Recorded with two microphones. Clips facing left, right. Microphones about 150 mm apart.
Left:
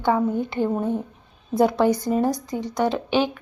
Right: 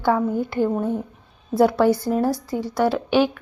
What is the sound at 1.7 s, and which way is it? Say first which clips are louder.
Speech: right 2 dB; 15° left (ahead or behind).